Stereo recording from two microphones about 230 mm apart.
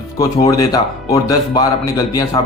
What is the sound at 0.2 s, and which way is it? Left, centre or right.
A man's voice, centre.